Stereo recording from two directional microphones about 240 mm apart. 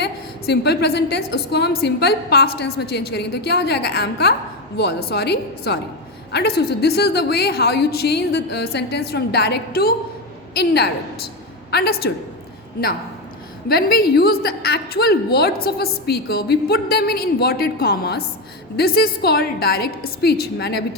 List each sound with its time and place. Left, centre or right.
0.0 s a woman's voice: left
13.7 s a woman's voice: left